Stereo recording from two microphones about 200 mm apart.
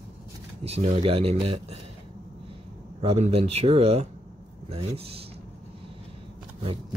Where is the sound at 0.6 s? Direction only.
30° right (ahead or behind).